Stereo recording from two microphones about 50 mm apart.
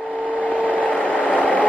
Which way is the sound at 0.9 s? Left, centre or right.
Left.